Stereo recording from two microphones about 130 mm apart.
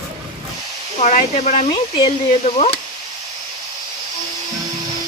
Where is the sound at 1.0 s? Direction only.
60° left (ahead or behind).